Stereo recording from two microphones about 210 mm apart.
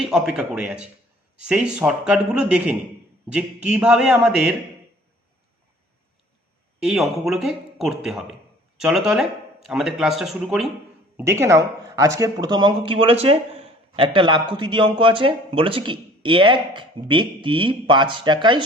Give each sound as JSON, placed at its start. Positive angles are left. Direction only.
{"t": 0.0, "sound": "speech", "side_deg": 0}
{"t": 7.3, "sound": "speech", "side_deg": 0}
{"t": 11.2, "sound": "speech", "side_deg": -15}